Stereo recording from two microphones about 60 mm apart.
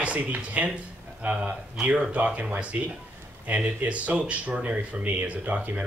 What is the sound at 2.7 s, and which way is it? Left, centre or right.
Speech, right.